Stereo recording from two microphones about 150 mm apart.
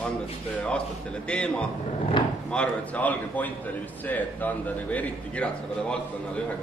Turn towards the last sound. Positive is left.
turn(degrees=10)  # may be behind; listen again after turning